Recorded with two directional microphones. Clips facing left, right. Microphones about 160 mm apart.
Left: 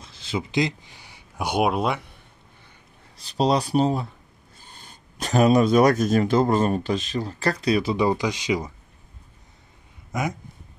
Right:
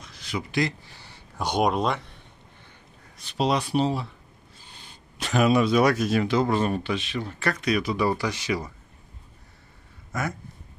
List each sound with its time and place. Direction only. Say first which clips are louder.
0.0 s speech: left 3 dB; 25° left (ahead or behind); by 2.0 s 10° left (ahead or behind)
3.2 s speech: left 3 dB; 35° left (ahead or behind); by 8.7 s 15° left (ahead or behind)
10.1 s speech: left 3 dB; 15° left (ahead or behind)